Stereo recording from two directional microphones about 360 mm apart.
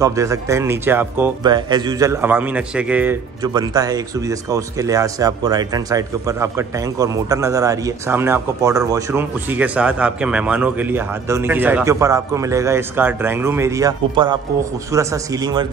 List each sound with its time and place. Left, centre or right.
0.0 s speech: centre